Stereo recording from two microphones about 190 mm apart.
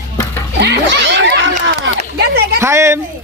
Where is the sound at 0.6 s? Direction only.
65° right (ahead or behind).